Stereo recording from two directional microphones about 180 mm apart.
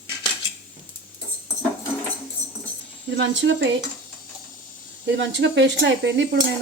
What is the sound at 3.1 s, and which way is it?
Speech, 85° right.